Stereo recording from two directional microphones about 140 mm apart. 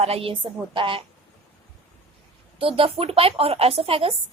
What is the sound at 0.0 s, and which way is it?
Speech, 45° right (ahead or behind).